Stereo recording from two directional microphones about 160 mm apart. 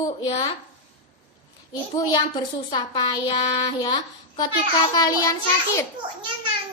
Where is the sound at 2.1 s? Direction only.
25° left (ahead or behind).